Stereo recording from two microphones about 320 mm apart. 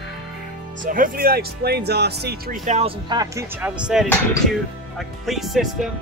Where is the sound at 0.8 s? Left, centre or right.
Right.